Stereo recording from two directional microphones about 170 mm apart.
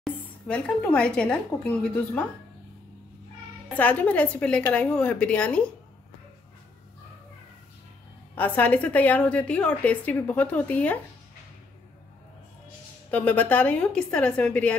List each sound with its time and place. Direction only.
0.0 s speech: 5° left (ahead or behind)
3.7 s a woman's voice: 10° left (ahead or behind)
8.4 s a woman's voice: 10° left (ahead or behind)
13.1 s a woman's voice: 10° left (ahead or behind)